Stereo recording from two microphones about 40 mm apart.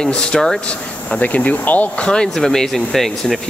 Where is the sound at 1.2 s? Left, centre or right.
Left.